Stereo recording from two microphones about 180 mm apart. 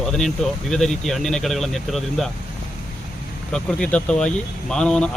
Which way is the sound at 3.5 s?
5° left (ahead or behind).